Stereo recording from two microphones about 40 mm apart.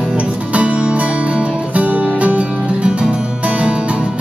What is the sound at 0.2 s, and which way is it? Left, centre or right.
Music, right.